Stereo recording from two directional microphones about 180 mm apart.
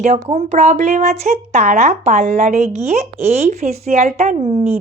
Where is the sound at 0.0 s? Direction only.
40° right (ahead or behind).